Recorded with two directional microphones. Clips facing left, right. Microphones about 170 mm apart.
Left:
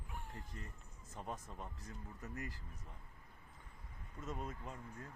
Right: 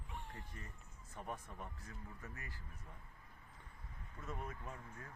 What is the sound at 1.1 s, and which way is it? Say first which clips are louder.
Speech: left 1 dB; 20° left (ahead or behind).